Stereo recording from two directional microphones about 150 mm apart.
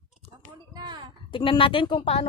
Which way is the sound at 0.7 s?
30° right (ahead or behind).